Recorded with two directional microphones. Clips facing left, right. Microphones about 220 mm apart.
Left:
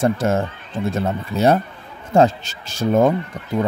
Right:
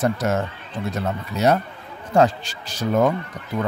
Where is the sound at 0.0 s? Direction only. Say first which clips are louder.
Left 3 dB; 30° left (ahead or behind).